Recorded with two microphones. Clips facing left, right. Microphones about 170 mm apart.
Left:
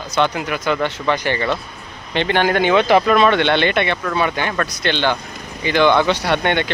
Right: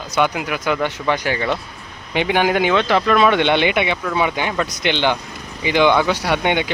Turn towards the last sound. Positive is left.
turn(degrees=-10)  # may be behind; listen again after turning